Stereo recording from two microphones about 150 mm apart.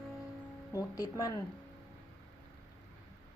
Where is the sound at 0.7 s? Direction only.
25° left (ahead or behind).